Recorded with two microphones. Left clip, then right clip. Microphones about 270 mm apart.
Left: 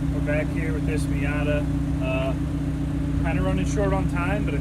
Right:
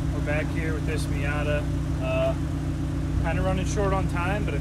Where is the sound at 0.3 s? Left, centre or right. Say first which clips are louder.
Left 1 dB; centre.